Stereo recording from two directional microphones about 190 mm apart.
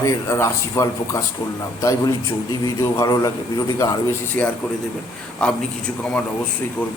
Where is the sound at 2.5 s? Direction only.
15° left (ahead or behind).